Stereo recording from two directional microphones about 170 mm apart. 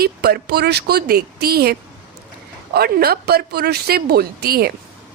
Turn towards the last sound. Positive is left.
turn(degrees=-65)  # may be behind; listen again after turning